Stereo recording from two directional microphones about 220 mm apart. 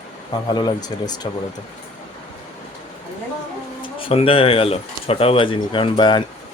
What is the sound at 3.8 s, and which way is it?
Speech, 25° left (ahead or behind).